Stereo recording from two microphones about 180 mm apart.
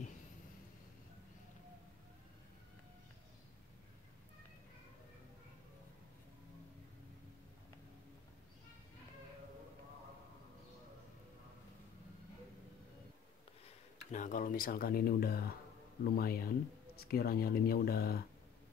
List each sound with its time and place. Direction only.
13.7 s speech: 45° left (ahead or behind)